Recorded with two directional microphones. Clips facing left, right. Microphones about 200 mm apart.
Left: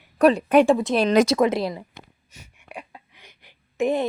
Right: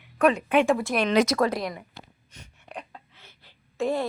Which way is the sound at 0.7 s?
20° left (ahead or behind).